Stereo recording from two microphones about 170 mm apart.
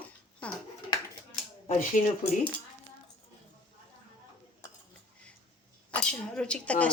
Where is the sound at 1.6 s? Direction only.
45° left (ahead or behind).